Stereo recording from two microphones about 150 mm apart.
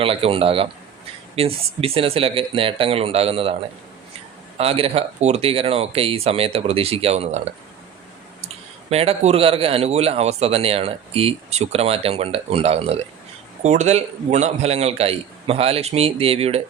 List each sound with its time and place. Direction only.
0.0 s a man's voice: 40° right (ahead or behind)
8.9 s a man's voice: 45° right (ahead or behind)